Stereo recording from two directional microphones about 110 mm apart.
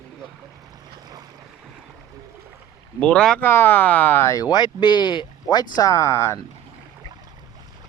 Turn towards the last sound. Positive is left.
turn(degrees=25)  # may be behind; listen again after turning